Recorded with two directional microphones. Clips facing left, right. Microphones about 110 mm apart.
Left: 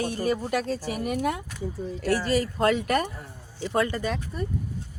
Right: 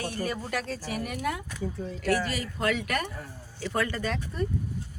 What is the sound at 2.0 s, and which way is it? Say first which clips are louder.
Speech: left 4 dB; 35° left (ahead or behind).